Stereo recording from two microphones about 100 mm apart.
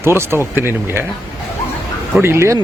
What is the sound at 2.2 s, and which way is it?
Speech, 25° right (ahead or behind).